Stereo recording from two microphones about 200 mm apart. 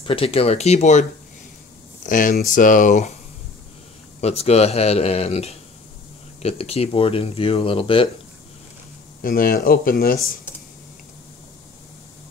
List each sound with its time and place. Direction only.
0.0 s a man's voice: 25° left (ahead or behind)
2.0 s a man's voice: 40° left (ahead or behind)
4.2 s a man's voice: 30° left (ahead or behind)
9.2 s speech: 50° left (ahead or behind)